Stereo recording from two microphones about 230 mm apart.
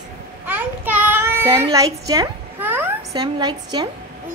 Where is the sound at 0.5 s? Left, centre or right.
Centre.